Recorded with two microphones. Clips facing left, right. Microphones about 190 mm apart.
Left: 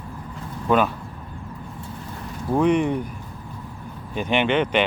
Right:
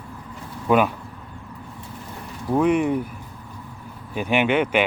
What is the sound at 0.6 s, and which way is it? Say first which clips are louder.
Speech: right 1 dB; 10° right (ahead or behind).